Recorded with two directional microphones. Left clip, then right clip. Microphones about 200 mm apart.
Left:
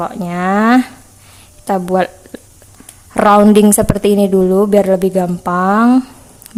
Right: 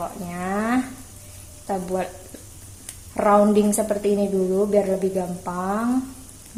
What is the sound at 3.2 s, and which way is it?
A woman's voice, 50° left (ahead or behind).